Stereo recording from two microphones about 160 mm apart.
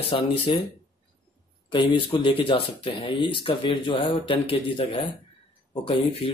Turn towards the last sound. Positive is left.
turn(degrees=35)  # may be behind; listen again after turning